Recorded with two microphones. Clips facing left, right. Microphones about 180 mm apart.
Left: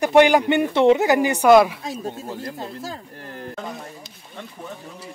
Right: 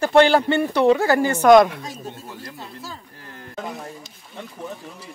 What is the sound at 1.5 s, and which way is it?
Speech, 5° left (ahead or behind).